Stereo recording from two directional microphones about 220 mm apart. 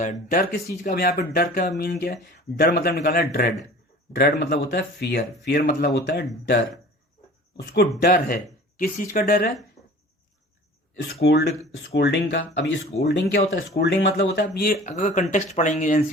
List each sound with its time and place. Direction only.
0.0 s speech: 40° left (ahead or behind)
9.8 s a sound: 15° left (ahead or behind)
10.9 s speech: 50° left (ahead or behind)
14.4 s speech: 40° left (ahead or behind)